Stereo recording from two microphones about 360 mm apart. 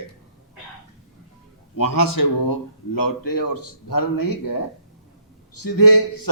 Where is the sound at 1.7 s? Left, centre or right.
Left.